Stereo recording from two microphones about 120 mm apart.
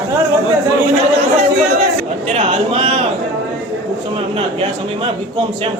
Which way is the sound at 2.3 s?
50° right (ahead or behind).